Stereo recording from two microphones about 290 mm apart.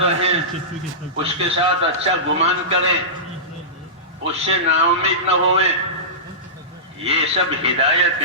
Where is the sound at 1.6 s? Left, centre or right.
Right.